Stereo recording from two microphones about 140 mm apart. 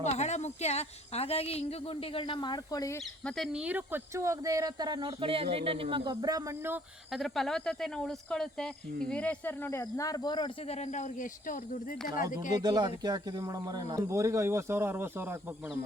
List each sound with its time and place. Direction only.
0.0 s a woman's voice: 55° left (ahead or behind); by 3.0 s 25° left (ahead or behind)
3.0 s speech: centre (ahead or behind); by 6.1 s 40° right (ahead or behind)
6.2 s speech: 25° right (ahead or behind)
7.1 s speech: centre (ahead or behind); by 10.5 s 30° left (ahead or behind)
10.7 s speech: 55° left (ahead or behind); by 12.2 s 75° left (ahead or behind)
12.6 s speech: 30° right (ahead or behind); by 15.8 s 10° right (ahead or behind)